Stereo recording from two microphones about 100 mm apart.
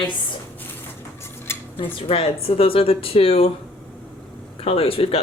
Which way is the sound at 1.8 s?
65° left (ahead or behind).